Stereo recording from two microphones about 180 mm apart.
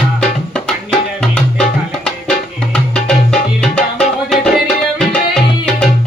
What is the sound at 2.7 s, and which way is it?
Music, 5° left (ahead or behind).